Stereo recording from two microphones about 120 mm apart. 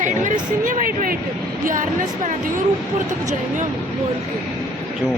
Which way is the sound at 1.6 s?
90° right.